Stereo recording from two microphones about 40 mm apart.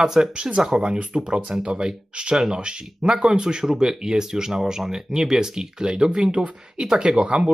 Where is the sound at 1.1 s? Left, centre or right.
Centre.